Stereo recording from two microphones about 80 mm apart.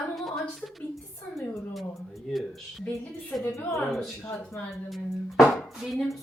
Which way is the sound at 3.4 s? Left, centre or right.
Left.